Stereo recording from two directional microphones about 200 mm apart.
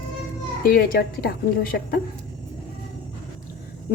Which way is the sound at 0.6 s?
45° left (ahead or behind).